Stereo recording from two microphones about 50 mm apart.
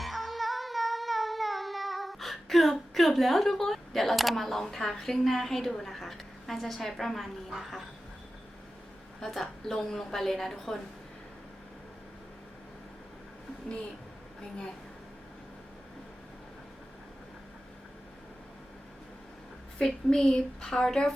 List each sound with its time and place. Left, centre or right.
0.0 s music: centre
9.2 s a woman's voice: centre
20.1 s a woman's voice: centre